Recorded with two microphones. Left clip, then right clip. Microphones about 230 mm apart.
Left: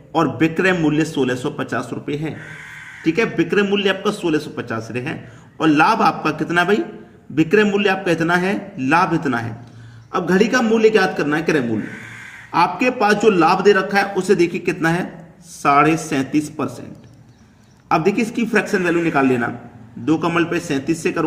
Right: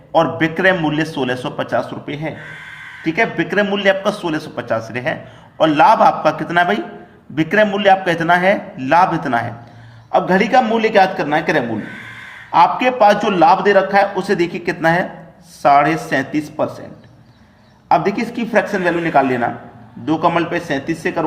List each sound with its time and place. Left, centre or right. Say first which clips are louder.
0.1 s a man's voice: right 3 dB; centre
17.8 s a man's voice: right 2 dB; left